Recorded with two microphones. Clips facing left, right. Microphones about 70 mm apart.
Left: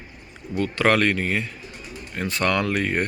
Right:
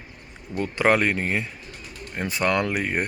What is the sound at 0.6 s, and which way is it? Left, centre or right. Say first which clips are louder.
Speech: left 1 dB; centre.